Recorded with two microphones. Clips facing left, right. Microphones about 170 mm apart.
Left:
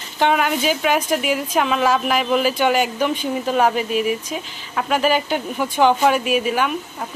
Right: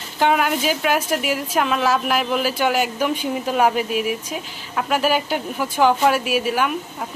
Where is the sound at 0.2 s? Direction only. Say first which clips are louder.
Even; 5° right (ahead or behind).